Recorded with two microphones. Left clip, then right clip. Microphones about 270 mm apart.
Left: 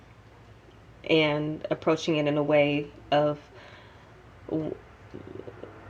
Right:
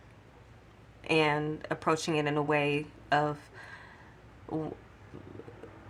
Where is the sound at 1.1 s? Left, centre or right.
Right.